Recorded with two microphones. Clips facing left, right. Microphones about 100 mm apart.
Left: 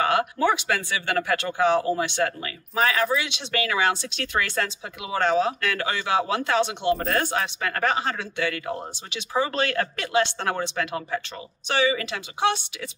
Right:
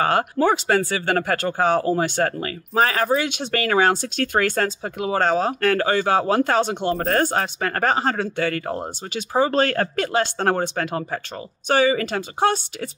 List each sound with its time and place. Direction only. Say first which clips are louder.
0.0 s speech: right 3 dB; 40° right (ahead or behind)